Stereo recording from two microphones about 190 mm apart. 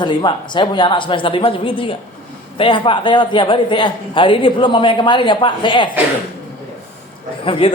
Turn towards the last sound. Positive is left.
turn(degrees=30)  # may be behind; listen again after turning